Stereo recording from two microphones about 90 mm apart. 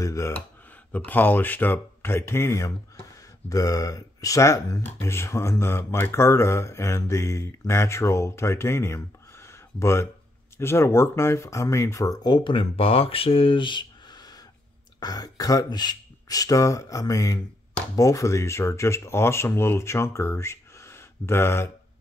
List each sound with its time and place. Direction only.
0.0 s speech: 35° left (ahead or behind)
0.9 s speech: 20° left (ahead or behind)